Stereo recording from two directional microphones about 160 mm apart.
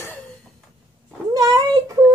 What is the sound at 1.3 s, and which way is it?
Speech, 25° right (ahead or behind).